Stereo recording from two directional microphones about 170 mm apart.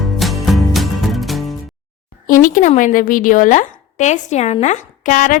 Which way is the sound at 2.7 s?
45° left (ahead or behind).